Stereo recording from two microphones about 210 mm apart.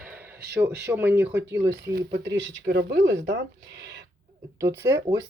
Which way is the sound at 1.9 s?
55° right (ahead or behind).